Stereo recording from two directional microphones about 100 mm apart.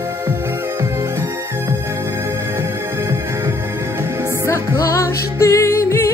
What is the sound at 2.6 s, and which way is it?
Music, 25° right (ahead or behind).